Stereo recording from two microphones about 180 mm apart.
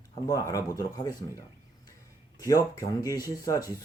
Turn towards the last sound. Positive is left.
turn(degrees=20)  # may be behind; listen again after turning